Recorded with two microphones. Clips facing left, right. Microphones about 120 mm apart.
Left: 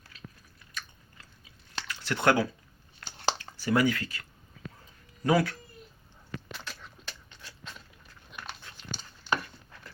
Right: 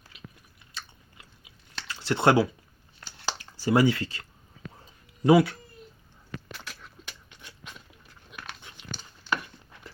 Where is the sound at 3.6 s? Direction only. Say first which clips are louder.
Right 4 dB; 30° right (ahead or behind).